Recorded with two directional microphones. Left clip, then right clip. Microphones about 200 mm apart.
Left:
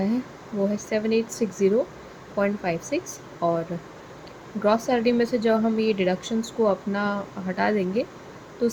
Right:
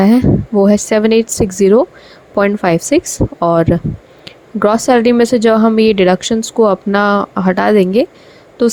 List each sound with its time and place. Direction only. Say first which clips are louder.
0.6 s speech: right 13 dB; 55° right (ahead or behind)